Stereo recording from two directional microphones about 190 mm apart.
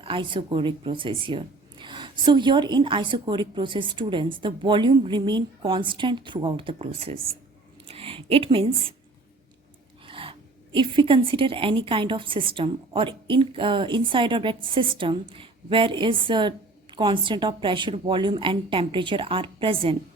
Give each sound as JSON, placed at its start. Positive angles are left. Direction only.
{"t": 0.0, "sound": "a woman's voice", "side_deg": -25}
{"t": 7.9, "sound": "a sound", "side_deg": -30}
{"t": 10.1, "sound": "a woman's voice", "side_deg": -30}